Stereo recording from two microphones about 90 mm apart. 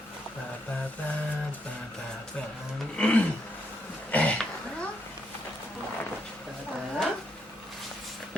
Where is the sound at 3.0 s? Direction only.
15° left (ahead or behind).